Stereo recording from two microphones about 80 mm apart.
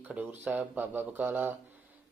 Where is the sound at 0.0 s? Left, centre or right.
Centre.